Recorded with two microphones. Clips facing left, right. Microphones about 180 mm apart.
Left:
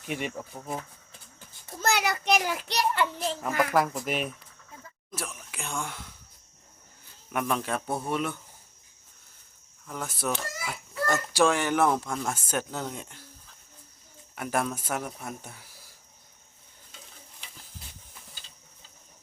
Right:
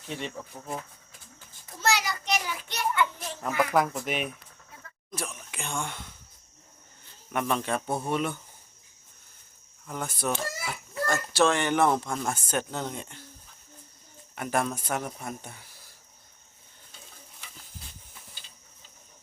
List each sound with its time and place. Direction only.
0.1 s speech: 10° left (ahead or behind)
1.8 s a sound: 55° left (ahead or behind)
2.7 s child singing: 35° left (ahead or behind)
3.6 s speech: centre (ahead or behind)
9.8 s speech: centre (ahead or behind)
14.3 s speech: centre (ahead or behind)